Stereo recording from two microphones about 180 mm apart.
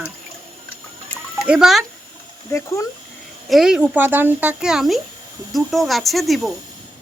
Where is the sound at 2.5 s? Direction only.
15° left (ahead or behind).